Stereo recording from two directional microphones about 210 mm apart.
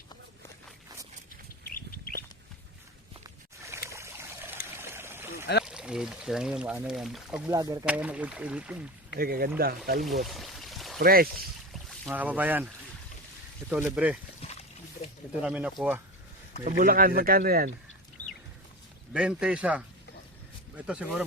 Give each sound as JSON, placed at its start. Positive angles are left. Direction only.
{"t": 1.6, "sound": "bird", "side_deg": 45}
{"t": 3.6, "sound": "trickle", "side_deg": -15}
{"t": 4.8, "sound": "stream", "side_deg": -10}
{"t": 5.6, "sound": "speech", "side_deg": -5}
{"t": 7.5, "sound": "speech", "side_deg": -15}
{"t": 9.1, "sound": "speech", "side_deg": -45}
{"t": 10.0, "sound": "pour", "side_deg": 0}
{"t": 11.0, "sound": "speech", "side_deg": -45}
{"t": 12.0, "sound": "speech", "side_deg": -10}
{"t": 15.4, "sound": "speech", "side_deg": -5}
{"t": 16.6, "sound": "speech", "side_deg": -40}
{"t": 19.1, "sound": "speech", "side_deg": -5}